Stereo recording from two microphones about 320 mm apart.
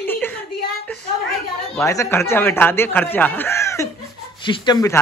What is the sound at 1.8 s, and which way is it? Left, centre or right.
A man's voice, centre.